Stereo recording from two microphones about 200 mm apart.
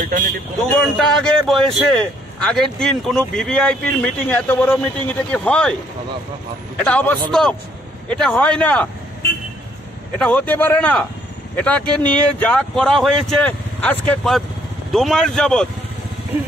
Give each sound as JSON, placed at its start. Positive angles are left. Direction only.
{"t": 0.0, "sound": "speech", "side_deg": -40}
{"t": 0.9, "sound": "speech", "side_deg": 0}
{"t": 6.8, "sound": "speech", "side_deg": 5}
{"t": 10.1, "sound": "speech", "side_deg": 5}